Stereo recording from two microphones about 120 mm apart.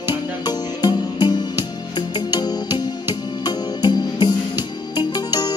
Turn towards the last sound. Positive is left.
turn(degrees=35)  # may be behind; listen again after turning